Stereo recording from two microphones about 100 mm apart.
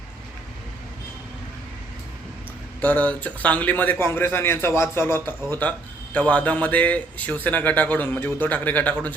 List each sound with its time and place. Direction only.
2.8 s a man's voice: 15° left (ahead or behind)